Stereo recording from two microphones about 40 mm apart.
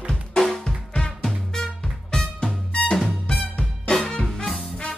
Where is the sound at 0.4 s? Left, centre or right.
Centre.